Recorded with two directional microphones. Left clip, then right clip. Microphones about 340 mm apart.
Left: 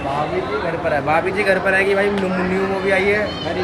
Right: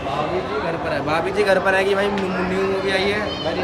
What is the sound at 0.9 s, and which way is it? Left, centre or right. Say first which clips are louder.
A man's voice: left 6 dB; centre.